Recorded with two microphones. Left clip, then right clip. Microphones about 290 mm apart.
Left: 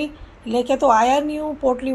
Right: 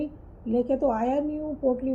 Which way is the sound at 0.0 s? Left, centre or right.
Left.